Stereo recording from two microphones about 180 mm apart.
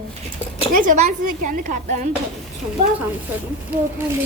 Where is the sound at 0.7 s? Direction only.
50° right (ahead or behind).